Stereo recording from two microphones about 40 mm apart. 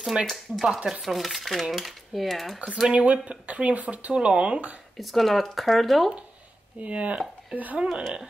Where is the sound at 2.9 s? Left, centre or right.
Right.